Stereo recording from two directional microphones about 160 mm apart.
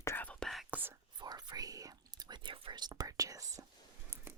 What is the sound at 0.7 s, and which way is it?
Whispering, 10° right (ahead or behind).